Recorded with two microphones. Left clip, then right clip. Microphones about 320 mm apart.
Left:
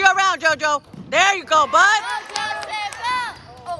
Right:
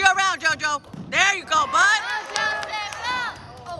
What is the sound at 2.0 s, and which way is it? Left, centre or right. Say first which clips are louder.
Music: even; left.